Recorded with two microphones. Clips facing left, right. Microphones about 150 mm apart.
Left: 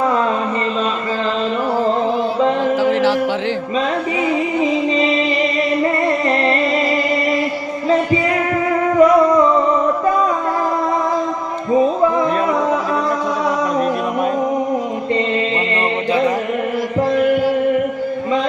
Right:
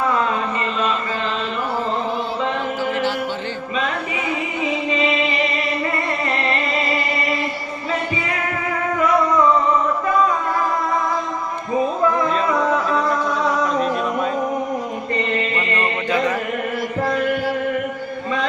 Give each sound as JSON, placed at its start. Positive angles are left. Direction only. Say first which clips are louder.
{"t": 2.8, "sound": "music", "louder": "left 6 dB", "side_deg": 90}
{"t": 4.9, "sound": "music", "louder": "left 4 dB", "side_deg": 35}
{"t": 9.0, "sound": "music", "louder": "left 9 dB", "side_deg": 35}